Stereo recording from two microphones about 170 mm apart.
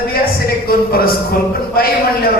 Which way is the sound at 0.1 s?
65° left (ahead or behind).